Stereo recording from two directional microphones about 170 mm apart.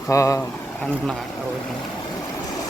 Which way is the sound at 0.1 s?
20° left (ahead or behind).